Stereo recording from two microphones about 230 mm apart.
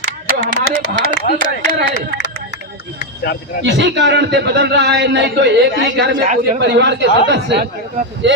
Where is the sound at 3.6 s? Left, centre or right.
Right.